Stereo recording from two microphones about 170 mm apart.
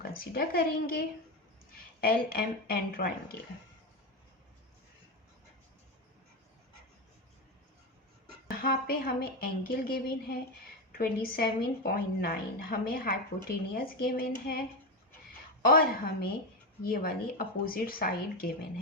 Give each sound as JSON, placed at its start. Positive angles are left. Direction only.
{"t": 0.0, "sound": "speech", "side_deg": 65}
{"t": 8.4, "sound": "speech", "side_deg": 60}
{"t": 15.3, "sound": "a sound", "side_deg": 60}
{"t": 16.8, "sound": "speech", "side_deg": 60}